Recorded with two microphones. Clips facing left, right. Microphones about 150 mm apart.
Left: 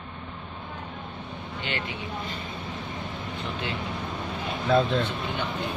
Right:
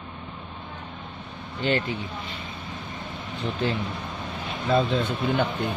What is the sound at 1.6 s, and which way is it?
Speech, 40° right (ahead or behind).